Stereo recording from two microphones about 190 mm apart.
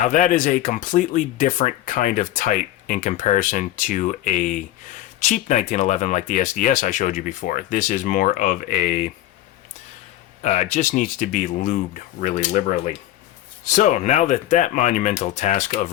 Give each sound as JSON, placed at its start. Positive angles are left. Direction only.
{"t": 0.0, "sound": "speech", "side_deg": 40}
{"t": 10.4, "sound": "speech", "side_deg": 40}
{"t": 12.7, "sound": "speech", "side_deg": 30}
{"t": 13.7, "sound": "speech", "side_deg": 40}